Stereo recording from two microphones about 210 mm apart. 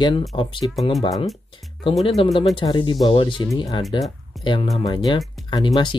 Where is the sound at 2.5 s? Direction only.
25° left (ahead or behind).